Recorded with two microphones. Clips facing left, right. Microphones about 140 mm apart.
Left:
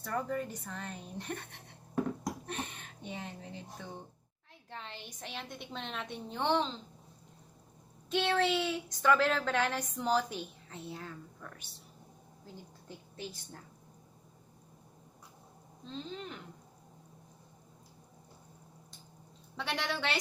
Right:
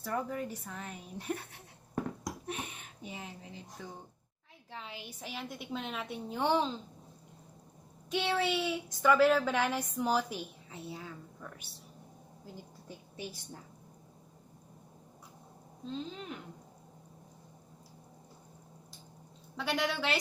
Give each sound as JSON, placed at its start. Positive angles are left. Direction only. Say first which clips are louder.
{"t": 0.0, "sound": "a woman's voice", "louder": "even", "side_deg": -5}
{"t": 8.1, "sound": "a woman's voice", "louder": "left 2 dB", "side_deg": -10}
{"t": 13.1, "sound": "a woman's voice", "louder": "right 1 dB", "side_deg": -10}
{"t": 15.9, "sound": "a woman's voice", "louder": "right 2 dB", "side_deg": -5}
{"t": 19.5, "sound": "a woman's voice", "louder": "right 3 dB", "side_deg": 0}